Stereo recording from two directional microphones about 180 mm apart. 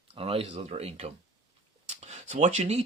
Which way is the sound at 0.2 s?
30° right (ahead or behind).